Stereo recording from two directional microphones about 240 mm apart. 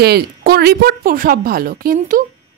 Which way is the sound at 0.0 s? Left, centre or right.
Right.